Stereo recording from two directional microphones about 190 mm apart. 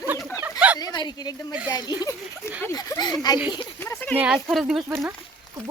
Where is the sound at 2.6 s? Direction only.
20° left (ahead or behind).